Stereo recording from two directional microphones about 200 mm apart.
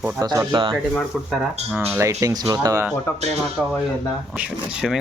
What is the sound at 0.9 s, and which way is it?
Speech, 5° right (ahead or behind).